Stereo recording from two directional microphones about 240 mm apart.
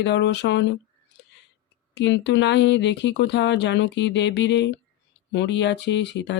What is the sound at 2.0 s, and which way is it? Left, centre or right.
Speech, left.